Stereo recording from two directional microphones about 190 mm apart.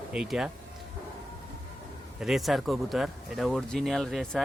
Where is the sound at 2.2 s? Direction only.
Centre (ahead or behind).